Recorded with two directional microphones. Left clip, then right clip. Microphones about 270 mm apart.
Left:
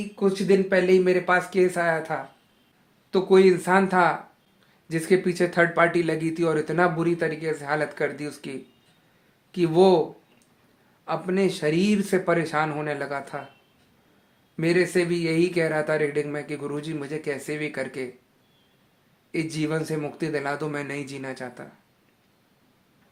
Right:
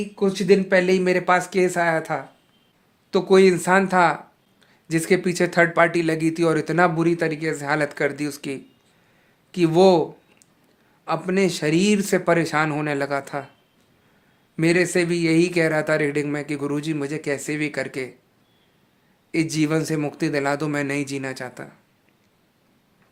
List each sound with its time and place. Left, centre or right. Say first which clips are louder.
0.2 s speech: right 3 dB; right
11.0 s speech: right 3 dB; right
14.5 s speech: right 3 dB; right
19.3 s speech: right 5 dB; right